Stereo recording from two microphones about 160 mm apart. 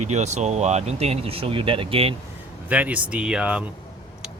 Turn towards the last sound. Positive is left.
turn(degrees=-5)  # may be behind; listen again after turning